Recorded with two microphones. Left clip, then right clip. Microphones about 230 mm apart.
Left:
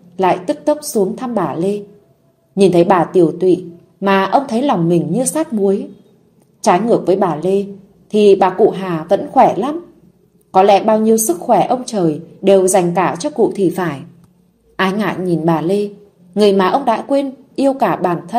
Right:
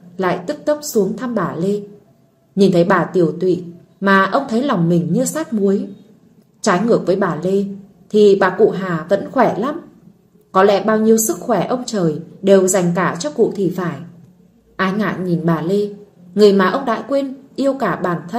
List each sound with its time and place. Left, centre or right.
0.1 s a woman's voice: centre